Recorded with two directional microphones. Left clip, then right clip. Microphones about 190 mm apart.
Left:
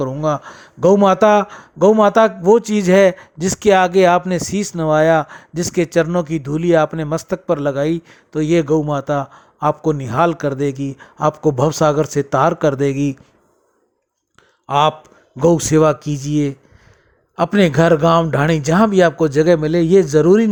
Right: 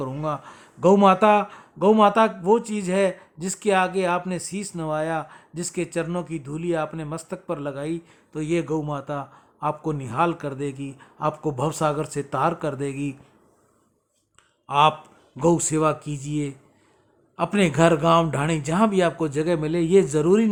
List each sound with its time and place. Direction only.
0.0 s speech: 25° left (ahead or behind)
14.7 s speech: 30° left (ahead or behind)